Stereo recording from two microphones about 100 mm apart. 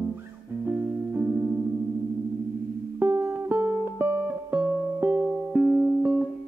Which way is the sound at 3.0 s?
25° right (ahead or behind).